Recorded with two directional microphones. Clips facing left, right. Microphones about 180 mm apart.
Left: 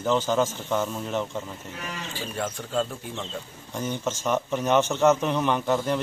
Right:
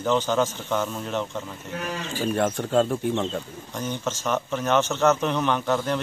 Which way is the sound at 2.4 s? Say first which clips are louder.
Right 5 dB; 55° right (ahead or behind).